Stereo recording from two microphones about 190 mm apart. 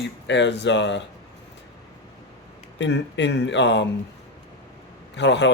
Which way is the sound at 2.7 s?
70° left (ahead or behind).